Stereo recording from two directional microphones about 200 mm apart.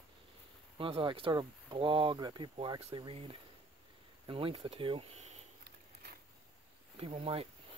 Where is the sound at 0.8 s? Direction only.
25° right (ahead or behind).